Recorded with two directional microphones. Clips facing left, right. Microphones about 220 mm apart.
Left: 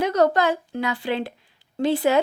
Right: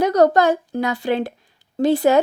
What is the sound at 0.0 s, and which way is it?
A woman's voice, 40° right (ahead or behind).